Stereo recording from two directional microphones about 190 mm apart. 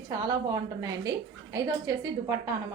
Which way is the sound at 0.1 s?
20° right (ahead or behind).